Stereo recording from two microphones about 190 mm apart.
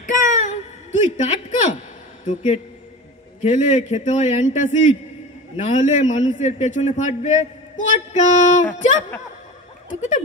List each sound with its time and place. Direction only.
0.0 s a sound: 40° left (ahead or behind)
1.1 s a man's voice: 40° left (ahead or behind)
9.8 s speech: 40° left (ahead or behind)